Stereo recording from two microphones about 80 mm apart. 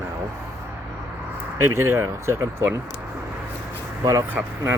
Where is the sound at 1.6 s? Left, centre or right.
Right.